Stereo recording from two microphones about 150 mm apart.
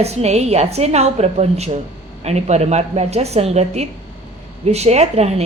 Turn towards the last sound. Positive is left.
turn(degrees=-45)  # may be behind; listen again after turning